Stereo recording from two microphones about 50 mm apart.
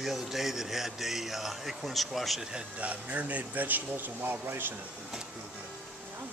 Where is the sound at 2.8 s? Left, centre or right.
Right.